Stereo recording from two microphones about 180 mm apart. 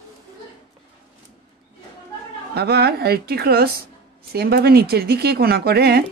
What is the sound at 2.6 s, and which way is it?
Speech, 60° right (ahead or behind).